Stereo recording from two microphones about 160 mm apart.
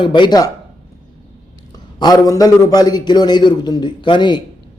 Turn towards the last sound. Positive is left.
turn(degrees=30)  # may be behind; listen again after turning